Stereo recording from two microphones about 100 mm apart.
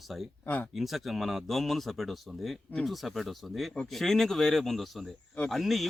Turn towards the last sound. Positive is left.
turn(degrees=0)  # may be behind; listen again after turning